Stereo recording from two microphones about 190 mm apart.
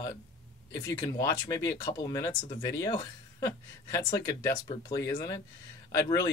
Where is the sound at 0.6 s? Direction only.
20° left (ahead or behind).